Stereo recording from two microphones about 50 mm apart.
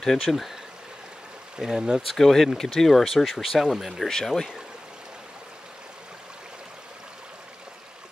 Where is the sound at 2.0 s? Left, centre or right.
Centre.